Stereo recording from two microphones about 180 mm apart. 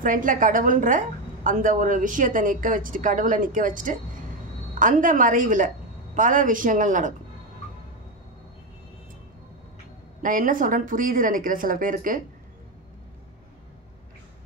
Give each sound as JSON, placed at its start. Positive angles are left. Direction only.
{"t": 0.0, "sound": "a woman's voice", "side_deg": -45}
{"t": 10.2, "sound": "a woman's voice", "side_deg": -50}